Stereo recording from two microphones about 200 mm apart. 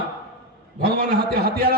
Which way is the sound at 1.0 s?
50° right (ahead or behind).